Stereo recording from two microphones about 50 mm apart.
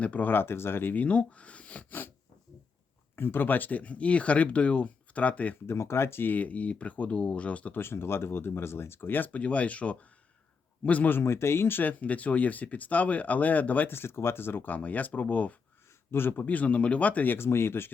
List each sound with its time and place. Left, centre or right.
0.0 s speech: left
0.3 s speech: left
1.0 s speech: left
1.9 s speech: left
3.2 s speech: left
5.6 s speech: left
6.2 s speech: left
7.7 s speech: left
11.1 s speech: left
11.8 s speech: left
13.9 s speech: left
17.3 s speech: left